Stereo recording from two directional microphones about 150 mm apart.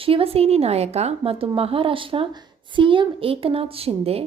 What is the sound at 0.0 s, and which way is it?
A woman's voice, 40° right (ahead or behind).